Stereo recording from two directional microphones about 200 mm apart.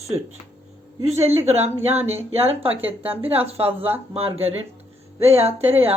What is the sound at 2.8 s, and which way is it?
Speech, 10° right (ahead or behind).